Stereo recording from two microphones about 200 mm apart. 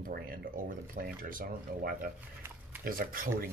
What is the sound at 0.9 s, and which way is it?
Speech, 50° right (ahead or behind).